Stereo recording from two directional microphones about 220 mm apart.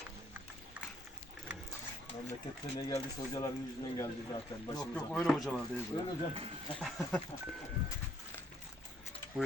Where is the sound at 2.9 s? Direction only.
15° left (ahead or behind).